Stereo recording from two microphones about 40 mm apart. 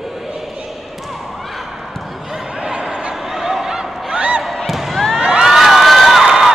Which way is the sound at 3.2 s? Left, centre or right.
Centre.